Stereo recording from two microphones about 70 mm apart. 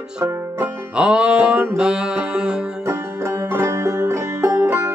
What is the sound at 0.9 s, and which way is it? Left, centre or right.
Music, centre.